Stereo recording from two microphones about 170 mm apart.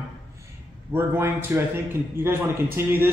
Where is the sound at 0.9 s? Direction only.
15° right (ahead or behind).